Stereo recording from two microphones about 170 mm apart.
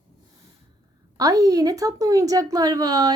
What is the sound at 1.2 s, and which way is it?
A woman's voice, 20° right (ahead or behind).